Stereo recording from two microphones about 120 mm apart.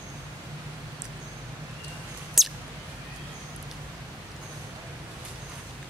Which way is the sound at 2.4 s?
Centre (ahead or behind).